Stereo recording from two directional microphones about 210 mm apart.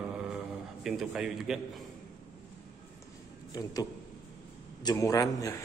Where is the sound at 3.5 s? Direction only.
20° left (ahead or behind).